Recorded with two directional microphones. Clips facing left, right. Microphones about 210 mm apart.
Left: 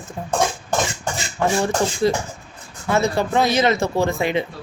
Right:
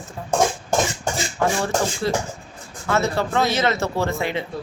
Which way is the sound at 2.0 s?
15° left (ahead or behind).